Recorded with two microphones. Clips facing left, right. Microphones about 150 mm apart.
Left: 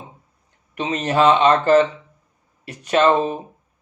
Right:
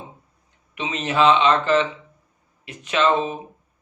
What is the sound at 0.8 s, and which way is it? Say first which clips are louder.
A man's voice: left 2 dB; 45° left (ahead or behind).